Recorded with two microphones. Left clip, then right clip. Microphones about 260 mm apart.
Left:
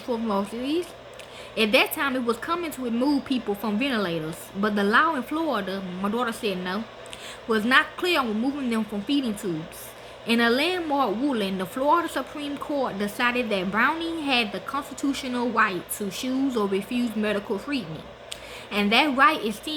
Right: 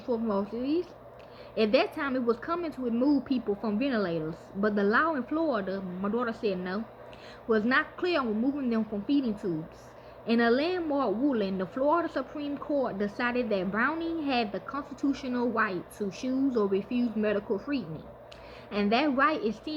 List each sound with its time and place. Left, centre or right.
0.1 s a woman's voice: centre